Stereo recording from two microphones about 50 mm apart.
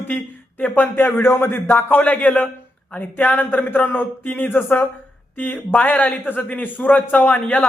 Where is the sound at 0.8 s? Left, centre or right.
Left.